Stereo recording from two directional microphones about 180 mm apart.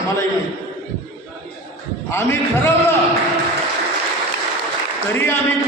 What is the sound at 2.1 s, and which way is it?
Speech, 15° left (ahead or behind).